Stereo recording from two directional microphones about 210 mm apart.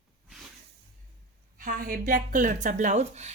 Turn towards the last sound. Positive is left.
turn(degrees=-35)  # may be behind; listen again after turning